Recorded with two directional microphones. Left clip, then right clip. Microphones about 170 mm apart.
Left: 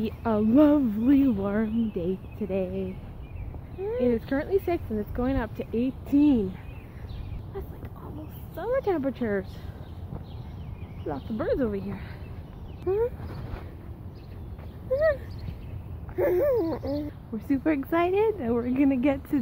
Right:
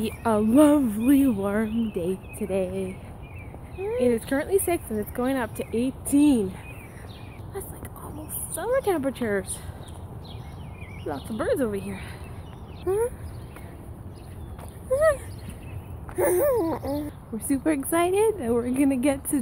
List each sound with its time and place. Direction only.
0.0 s speech: 10° right (ahead or behind)
4.0 s speech: centre (ahead or behind)
8.5 s speech: centre (ahead or behind)
11.1 s speech: 5° left (ahead or behind)
14.9 s speech: 5° left (ahead or behind)
16.2 s a sound: 20° right (ahead or behind)
17.5 s speech: 5° right (ahead or behind)